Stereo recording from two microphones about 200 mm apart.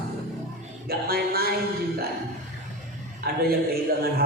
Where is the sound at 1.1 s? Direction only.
50° right (ahead or behind).